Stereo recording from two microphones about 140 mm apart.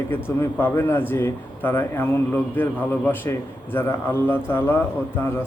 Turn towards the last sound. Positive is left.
turn(degrees=15)  # may be behind; listen again after turning